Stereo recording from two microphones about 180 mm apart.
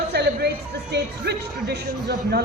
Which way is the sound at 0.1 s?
65° right (ahead or behind).